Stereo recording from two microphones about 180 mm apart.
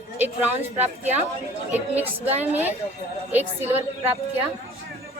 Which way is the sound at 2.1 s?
35° right (ahead or behind).